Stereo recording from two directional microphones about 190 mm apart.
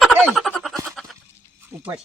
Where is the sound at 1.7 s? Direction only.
20° right (ahead or behind).